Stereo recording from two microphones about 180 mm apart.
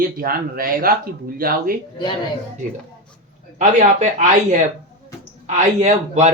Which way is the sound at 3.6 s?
40° right (ahead or behind).